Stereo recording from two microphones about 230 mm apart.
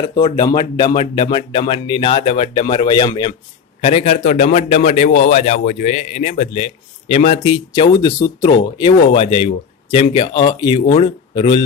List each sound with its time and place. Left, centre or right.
0.1 s a man's voice: centre